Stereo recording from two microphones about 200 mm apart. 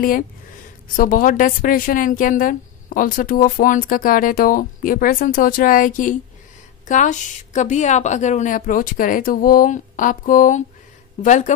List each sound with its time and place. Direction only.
0.9 s a woman's voice: 45° left (ahead or behind)